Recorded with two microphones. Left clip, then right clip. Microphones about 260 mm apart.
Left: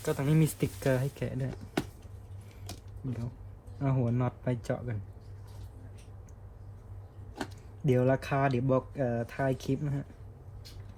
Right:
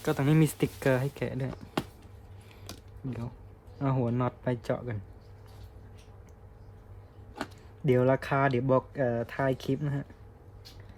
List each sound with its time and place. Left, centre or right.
0.0 s speech: right
3.8 s speech: right
7.9 s speech: right